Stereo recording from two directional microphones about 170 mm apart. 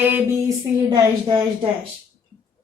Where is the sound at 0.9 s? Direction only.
30° right (ahead or behind).